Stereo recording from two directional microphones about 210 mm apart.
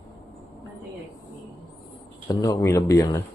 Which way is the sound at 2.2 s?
15° left (ahead or behind).